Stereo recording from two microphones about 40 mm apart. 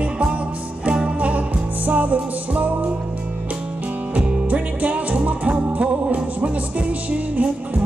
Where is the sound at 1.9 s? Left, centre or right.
Right.